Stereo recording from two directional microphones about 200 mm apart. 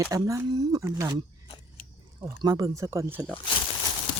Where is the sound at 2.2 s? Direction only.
20° right (ahead or behind).